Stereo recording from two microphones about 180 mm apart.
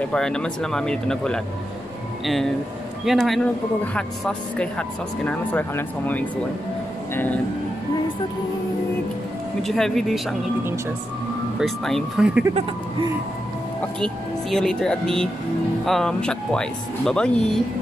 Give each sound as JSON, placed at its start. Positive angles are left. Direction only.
{"t": 0.0, "sound": "speech", "side_deg": 5}
{"t": 9.6, "sound": "speech", "side_deg": 0}
{"t": 11.6, "sound": "speech", "side_deg": 0}
{"t": 13.9, "sound": "speech", "side_deg": 5}